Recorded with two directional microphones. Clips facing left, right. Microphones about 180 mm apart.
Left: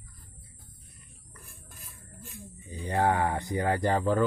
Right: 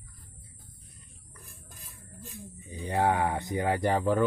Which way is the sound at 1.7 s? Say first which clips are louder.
Even; 15° right (ahead or behind).